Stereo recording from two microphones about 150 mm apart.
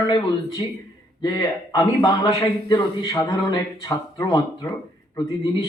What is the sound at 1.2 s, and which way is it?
A man's voice, 25° left (ahead or behind).